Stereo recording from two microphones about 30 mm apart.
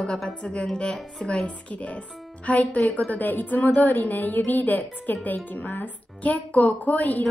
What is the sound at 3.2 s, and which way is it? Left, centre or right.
A woman's voice, left.